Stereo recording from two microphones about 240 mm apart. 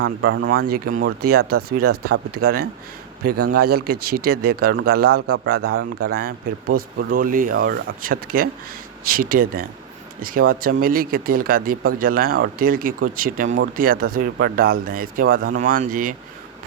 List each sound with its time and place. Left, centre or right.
0.0 s speech: right
0.4 s a man's voice: right